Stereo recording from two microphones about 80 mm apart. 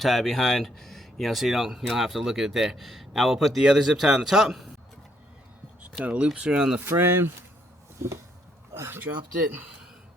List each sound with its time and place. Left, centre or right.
0.0 s speech: centre
6.0 s speech: centre
6.7 s speech: right
7.9 s a sound: right
8.7 s speech: right